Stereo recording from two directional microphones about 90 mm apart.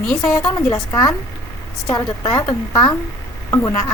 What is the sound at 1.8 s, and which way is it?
A woman's voice, 50° left (ahead or behind).